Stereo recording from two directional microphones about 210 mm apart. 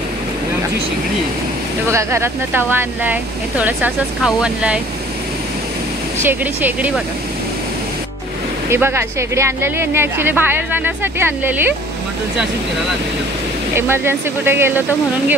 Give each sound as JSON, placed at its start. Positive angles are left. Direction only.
{"t": 1.9, "sound": "speech", "side_deg": -15}
{"t": 6.2, "sound": "speech", "side_deg": -10}
{"t": 8.6, "sound": "speech", "side_deg": -10}
{"t": 13.7, "sound": "speech", "side_deg": -10}